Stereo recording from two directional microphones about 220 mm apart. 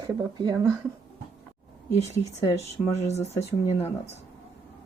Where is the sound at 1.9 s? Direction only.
30° left (ahead or behind).